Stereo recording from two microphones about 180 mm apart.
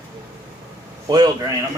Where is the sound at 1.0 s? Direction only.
20° right (ahead or behind).